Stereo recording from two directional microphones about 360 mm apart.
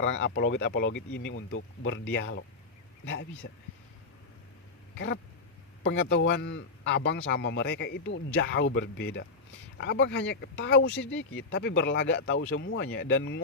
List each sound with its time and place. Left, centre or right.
0.0 s speech: left
4.9 s speech: left